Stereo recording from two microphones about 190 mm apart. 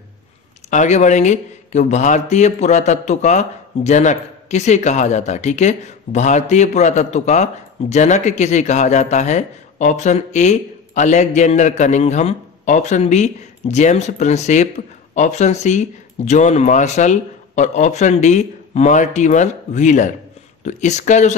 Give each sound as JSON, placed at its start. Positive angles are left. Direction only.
{"t": 0.7, "sound": "a man's voice", "side_deg": 40}